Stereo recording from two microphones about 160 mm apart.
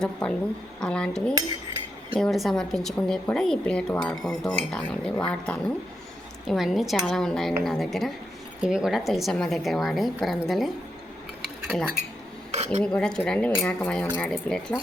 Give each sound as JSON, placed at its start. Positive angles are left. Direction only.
{"t": 0.0, "sound": "a woman's voice", "side_deg": 5}
{"t": 12.5, "sound": "dishes", "side_deg": -40}
{"t": 12.8, "sound": "a woman's voice", "side_deg": 5}